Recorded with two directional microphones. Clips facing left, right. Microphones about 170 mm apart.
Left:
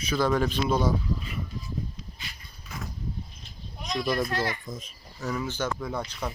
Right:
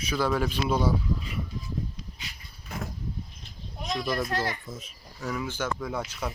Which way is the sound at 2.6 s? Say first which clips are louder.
Right 3 dB; 55° right (ahead or behind).